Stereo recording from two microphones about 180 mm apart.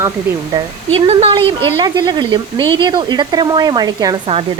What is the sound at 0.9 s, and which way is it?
Speech, 35° right (ahead or behind).